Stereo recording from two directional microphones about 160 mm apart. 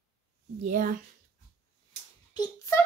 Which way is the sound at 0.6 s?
55° right (ahead or behind).